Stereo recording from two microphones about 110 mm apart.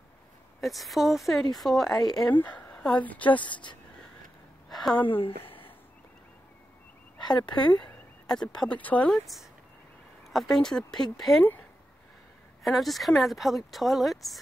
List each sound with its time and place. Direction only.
0.6 s a woman's voice: centre (ahead or behind)
4.6 s a sound: centre (ahead or behind)
5.2 s speech: 55° left (ahead or behind)
7.2 s speech: 45° left (ahead or behind)
8.3 s a woman's voice: 5° left (ahead or behind)
9.2 s speech: centre (ahead or behind)
12.6 s speech: centre (ahead or behind)